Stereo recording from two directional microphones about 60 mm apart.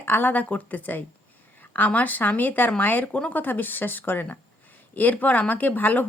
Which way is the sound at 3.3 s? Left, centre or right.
Left.